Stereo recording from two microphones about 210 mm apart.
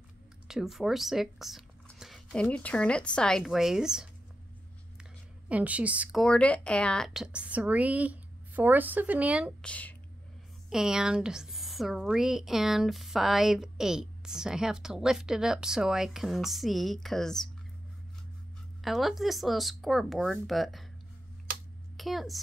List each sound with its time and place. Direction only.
0.5 s speech: centre (ahead or behind)
5.5 s a woman's voice: 5° right (ahead or behind)
9.6 s a woman's voice: 5° left (ahead or behind)
18.8 s speech: centre (ahead or behind)
21.9 s a woman's voice: centre (ahead or behind)